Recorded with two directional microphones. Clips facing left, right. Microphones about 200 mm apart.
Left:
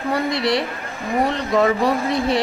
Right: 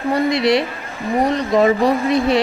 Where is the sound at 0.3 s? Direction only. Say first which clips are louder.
Right 6 dB; 20° right (ahead or behind).